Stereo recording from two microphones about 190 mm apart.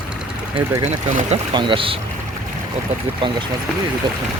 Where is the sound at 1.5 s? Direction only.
25° right (ahead or behind).